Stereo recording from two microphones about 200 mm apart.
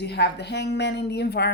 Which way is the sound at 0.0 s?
55° left (ahead or behind).